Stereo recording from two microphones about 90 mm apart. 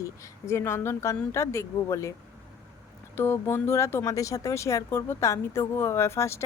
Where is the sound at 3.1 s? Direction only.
25° left (ahead or behind).